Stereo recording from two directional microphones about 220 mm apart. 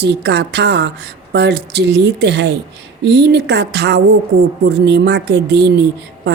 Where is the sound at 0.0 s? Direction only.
50° right (ahead or behind).